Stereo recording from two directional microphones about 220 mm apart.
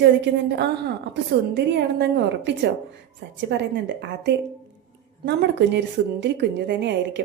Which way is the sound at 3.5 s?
55° right (ahead or behind).